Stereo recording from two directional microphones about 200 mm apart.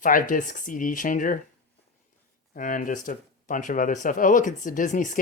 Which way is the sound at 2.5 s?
40° left (ahead or behind).